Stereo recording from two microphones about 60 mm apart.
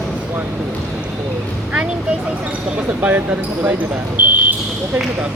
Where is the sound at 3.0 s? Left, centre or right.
Right.